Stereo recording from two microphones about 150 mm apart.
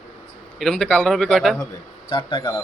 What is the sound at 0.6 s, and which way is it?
A man's voice, 5° left (ahead or behind).